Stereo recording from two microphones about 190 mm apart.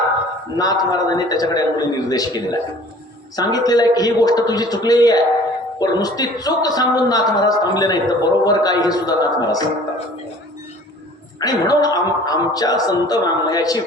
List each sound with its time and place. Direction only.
0.5 s a man's voice: 20° left (ahead or behind)
11.3 s a man's voice: 20° left (ahead or behind)